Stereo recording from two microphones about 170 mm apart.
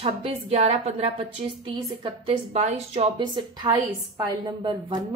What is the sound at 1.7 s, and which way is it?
Speech, 25° right (ahead or behind).